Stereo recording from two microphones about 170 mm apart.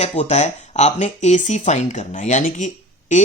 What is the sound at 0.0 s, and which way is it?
Speech, 40° left (ahead or behind).